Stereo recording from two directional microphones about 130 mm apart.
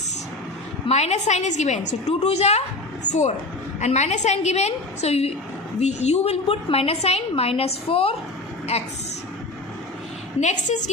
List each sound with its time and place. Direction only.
0.9 s a woman's voice: 55° left (ahead or behind)
10.4 s a woman's voice: 65° left (ahead or behind)